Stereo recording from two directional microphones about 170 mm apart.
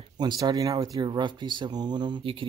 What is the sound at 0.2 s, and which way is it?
Speech, 25° right (ahead or behind).